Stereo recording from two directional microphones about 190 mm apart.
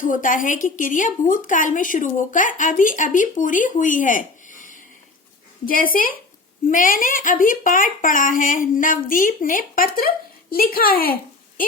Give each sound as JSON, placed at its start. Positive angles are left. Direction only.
{"t": 0.0, "sound": "a woman's voice", "side_deg": 45}